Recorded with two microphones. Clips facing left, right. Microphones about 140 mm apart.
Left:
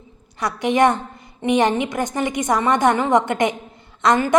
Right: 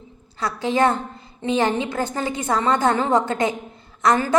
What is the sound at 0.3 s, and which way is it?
A woman's voice, 20° left (ahead or behind).